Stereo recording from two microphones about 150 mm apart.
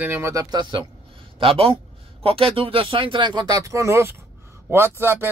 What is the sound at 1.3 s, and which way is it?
Speech, 40° right (ahead or behind).